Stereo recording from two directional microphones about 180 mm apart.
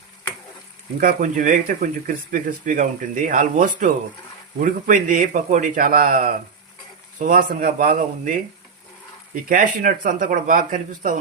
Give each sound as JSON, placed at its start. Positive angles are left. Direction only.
{"t": 0.9, "sound": "speech", "side_deg": -50}